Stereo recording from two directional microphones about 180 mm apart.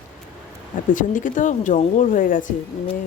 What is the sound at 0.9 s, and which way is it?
Speech, 45° left (ahead or behind).